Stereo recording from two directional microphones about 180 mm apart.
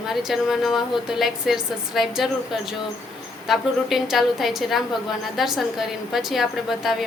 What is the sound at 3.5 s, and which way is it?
A woman's voice, centre (ahead or behind).